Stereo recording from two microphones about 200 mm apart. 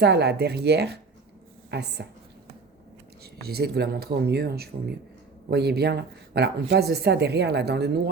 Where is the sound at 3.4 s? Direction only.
50° right (ahead or behind).